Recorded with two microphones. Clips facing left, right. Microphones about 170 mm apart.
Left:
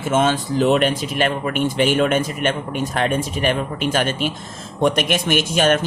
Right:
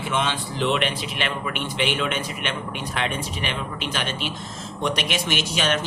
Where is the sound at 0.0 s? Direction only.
45° left (ahead or behind).